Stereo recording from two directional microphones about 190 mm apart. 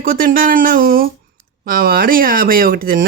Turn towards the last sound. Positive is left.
turn(degrees=-50)  # may be behind; listen again after turning